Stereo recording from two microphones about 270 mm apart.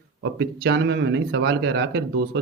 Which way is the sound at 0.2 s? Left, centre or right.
Right.